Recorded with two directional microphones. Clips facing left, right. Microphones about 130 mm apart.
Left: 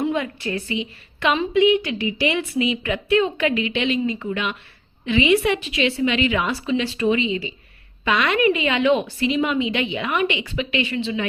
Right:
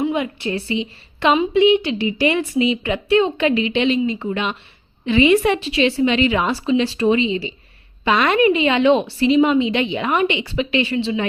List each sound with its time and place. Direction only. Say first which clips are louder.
0.1 s a woman's voice: right 2 dB; 20° right (ahead or behind)